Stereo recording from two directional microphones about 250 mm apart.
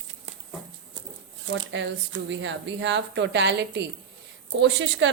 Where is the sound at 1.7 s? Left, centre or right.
Right.